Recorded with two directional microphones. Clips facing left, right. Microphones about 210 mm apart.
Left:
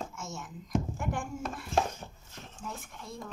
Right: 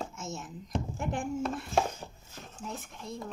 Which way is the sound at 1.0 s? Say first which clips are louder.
Right 3 dB; 20° right (ahead or behind).